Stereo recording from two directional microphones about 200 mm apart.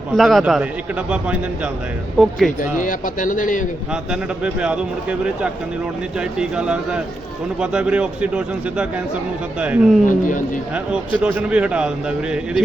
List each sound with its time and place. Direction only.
0.2 s a man's voice: centre (ahead or behind)
2.2 s a man's voice: centre (ahead or behind)
2.6 s speech: 40° left (ahead or behind)
4.1 s a man's voice: 5° right (ahead or behind)
10.1 s speech: 40° left (ahead or behind)
10.9 s a man's voice: 5° right (ahead or behind)